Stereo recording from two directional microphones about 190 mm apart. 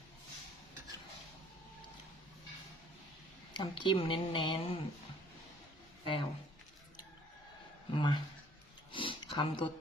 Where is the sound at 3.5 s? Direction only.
25° left (ahead or behind).